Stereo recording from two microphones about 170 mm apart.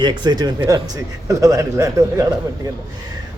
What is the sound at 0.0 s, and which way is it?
A man's voice, 25° right (ahead or behind).